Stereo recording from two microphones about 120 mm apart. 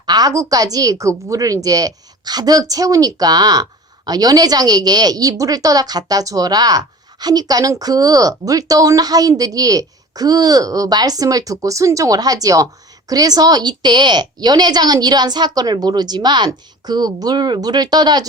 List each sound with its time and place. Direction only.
0.0 s a woman's voice: 35° right (ahead or behind)